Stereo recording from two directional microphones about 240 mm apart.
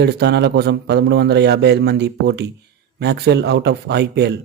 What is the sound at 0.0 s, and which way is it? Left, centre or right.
A man's voice, right.